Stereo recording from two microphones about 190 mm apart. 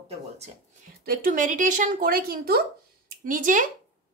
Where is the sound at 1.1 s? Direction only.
50° right (ahead or behind).